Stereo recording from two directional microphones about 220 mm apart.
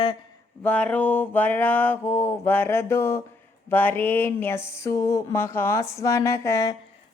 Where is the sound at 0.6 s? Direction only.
5° left (ahead or behind).